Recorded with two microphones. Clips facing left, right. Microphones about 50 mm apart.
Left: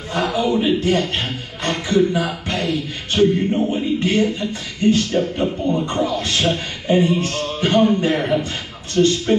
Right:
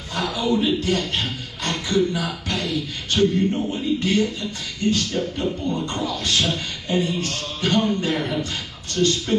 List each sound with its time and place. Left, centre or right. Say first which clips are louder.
0.1 s speech: left 4 dB; left